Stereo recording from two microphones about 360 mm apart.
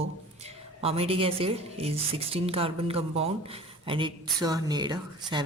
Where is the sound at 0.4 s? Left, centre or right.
Centre.